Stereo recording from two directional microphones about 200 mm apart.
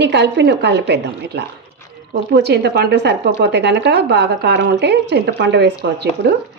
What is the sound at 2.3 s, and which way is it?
A woman's voice, 55° right (ahead or behind).